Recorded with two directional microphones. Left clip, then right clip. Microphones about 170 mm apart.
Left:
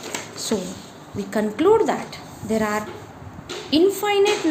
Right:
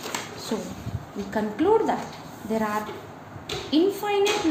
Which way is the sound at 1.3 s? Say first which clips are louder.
Left 4 dB; 45° left (ahead or behind).